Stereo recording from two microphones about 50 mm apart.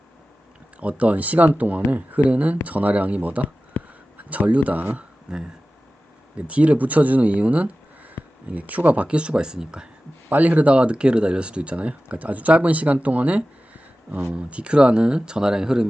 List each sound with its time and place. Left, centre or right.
0.8 s speech: right
3.8 s a sound: left
4.2 s speech: right
5.3 s speech: centre
6.3 s speech: right
9.0 s speech: right
10.2 s speech: right; by 15.9 s centre